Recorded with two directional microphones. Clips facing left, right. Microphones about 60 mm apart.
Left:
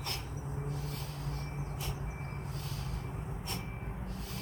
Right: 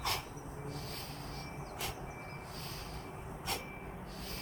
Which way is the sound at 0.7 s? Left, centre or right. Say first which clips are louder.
Left 3 dB; right.